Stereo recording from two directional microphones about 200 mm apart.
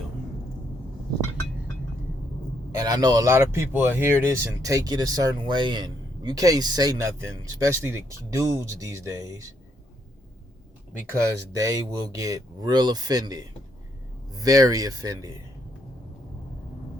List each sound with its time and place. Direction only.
2.7 s a man's voice: 20° right (ahead or behind)
11.1 s a man's voice: 15° right (ahead or behind)